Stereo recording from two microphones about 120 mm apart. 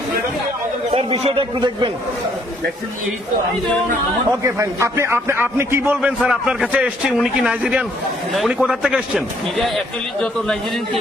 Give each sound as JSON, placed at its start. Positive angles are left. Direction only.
{"t": 0.9, "sound": "speech", "side_deg": -55}
{"t": 4.4, "sound": "a man's voice", "side_deg": -25}
{"t": 6.0, "sound": "a man's voice", "side_deg": -10}